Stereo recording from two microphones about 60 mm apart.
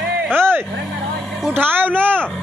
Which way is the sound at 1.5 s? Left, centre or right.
Right.